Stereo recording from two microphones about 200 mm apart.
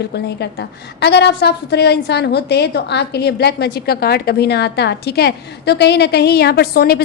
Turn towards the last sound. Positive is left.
turn(degrees=50)  # may be behind; listen again after turning